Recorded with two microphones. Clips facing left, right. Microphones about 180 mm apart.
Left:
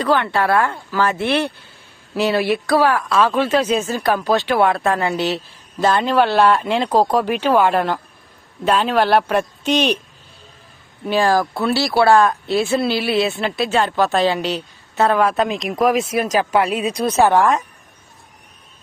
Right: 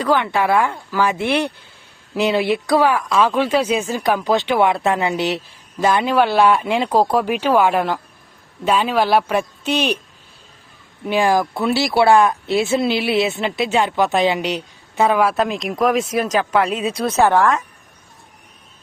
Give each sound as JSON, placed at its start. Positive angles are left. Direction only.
{"t": 0.0, "sound": "speech", "side_deg": -15}
{"t": 11.0, "sound": "speech", "side_deg": -20}